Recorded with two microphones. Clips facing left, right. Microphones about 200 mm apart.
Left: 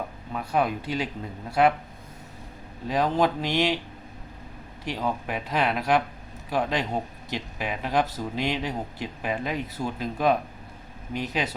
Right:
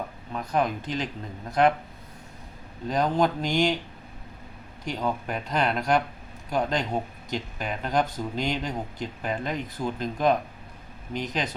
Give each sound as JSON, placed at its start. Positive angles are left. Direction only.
{"t": 0.3, "sound": "speech", "side_deg": 5}
{"t": 2.9, "sound": "speech", "side_deg": 5}
{"t": 4.9, "sound": "speech", "side_deg": 5}